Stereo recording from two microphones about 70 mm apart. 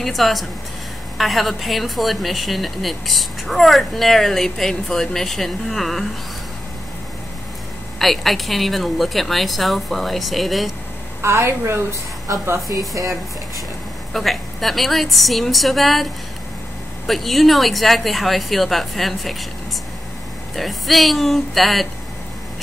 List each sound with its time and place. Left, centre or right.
0.0 s a woman's voice: centre
8.0 s a woman's voice: centre
11.1 s a woman's voice: right
12.6 s speech: right
14.1 s a woman's voice: centre
20.5 s a woman's voice: centre